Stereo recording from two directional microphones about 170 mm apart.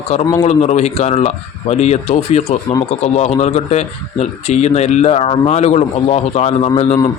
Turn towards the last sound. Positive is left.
turn(degrees=35)  # may be behind; listen again after turning